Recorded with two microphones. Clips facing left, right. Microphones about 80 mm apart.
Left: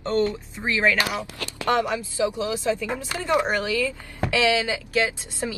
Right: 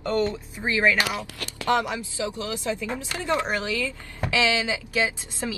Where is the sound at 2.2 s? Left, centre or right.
Centre.